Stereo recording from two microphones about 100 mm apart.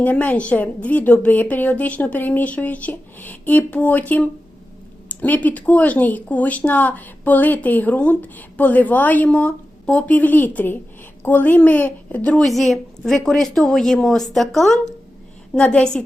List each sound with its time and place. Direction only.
0.0 s a woman's voice: 15° left (ahead or behind)